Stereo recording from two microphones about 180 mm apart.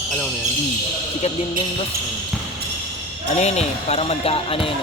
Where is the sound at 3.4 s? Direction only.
35° left (ahead or behind).